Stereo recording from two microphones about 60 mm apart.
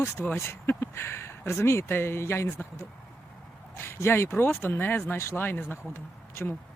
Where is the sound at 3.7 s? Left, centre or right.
Left.